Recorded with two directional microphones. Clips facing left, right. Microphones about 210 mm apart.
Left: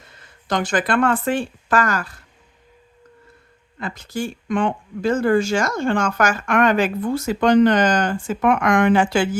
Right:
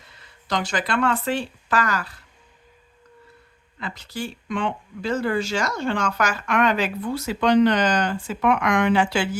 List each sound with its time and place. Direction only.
0.0 s speech: 50° left (ahead or behind)
3.8 s speech: 50° left (ahead or behind)